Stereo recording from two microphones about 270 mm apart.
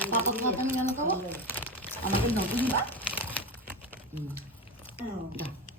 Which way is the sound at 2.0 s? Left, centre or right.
Left.